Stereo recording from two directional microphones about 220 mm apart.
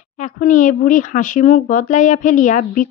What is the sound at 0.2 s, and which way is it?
Speech, 35° left (ahead or behind).